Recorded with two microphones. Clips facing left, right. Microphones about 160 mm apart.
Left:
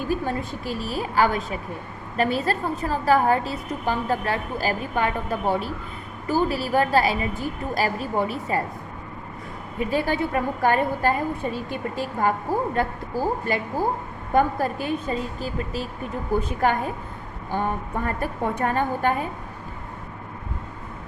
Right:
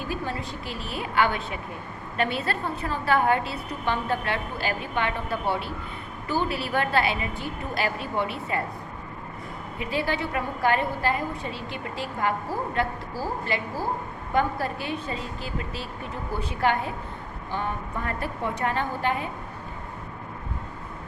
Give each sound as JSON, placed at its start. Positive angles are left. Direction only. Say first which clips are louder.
{"t": 0.1, "sound": "a woman's voice", "louder": "left 6 dB", "side_deg": 45}
{"t": 9.8, "sound": "a woman's voice", "louder": "left 4 dB", "side_deg": 45}